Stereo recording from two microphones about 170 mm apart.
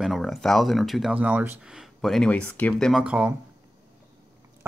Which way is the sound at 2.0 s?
5° left (ahead or behind).